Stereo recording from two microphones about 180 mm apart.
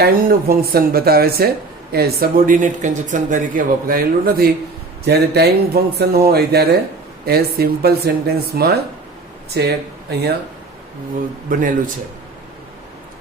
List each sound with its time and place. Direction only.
0.0 s speech: 55° right (ahead or behind)
5.0 s speech: 65° right (ahead or behind)
11.5 s speech: 50° right (ahead or behind)